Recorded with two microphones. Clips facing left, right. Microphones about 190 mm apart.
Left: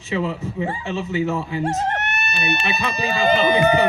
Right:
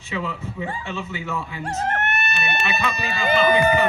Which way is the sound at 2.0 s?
50° right (ahead or behind).